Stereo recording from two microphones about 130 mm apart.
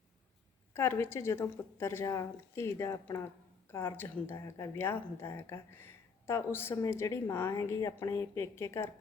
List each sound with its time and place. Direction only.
0.7 s speech: 20° left (ahead or behind)